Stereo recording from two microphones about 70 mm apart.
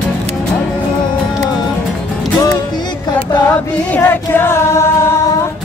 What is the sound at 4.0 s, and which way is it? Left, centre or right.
Singing, left.